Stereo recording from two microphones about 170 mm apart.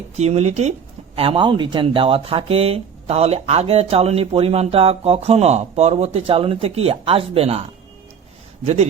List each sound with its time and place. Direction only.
0.2 s speech: 40° right (ahead or behind)